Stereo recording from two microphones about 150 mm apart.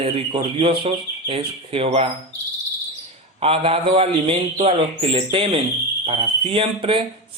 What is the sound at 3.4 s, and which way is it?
Speech, 40° right (ahead or behind).